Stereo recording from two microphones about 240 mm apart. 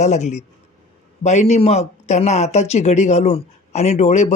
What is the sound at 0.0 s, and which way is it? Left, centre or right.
Speech, left.